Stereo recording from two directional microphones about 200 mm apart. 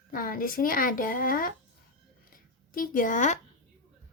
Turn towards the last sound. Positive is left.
turn(degrees=40)  # may be behind; listen again after turning